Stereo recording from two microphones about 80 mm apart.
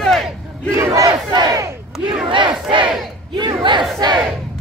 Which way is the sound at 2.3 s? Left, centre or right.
Right.